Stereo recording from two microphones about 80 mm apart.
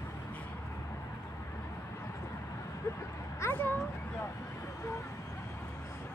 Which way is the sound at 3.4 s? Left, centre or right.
Left.